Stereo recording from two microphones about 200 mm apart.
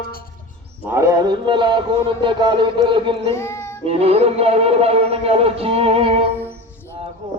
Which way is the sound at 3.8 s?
30° right (ahead or behind).